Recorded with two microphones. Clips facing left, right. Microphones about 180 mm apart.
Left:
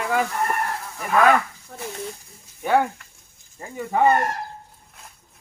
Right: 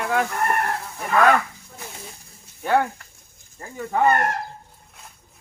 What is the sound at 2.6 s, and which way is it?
Speech, centre (ahead or behind).